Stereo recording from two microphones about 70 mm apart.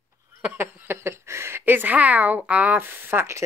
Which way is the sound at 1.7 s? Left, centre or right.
Right.